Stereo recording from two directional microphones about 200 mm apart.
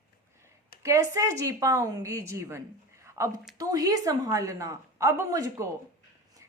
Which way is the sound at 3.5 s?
15° right (ahead or behind).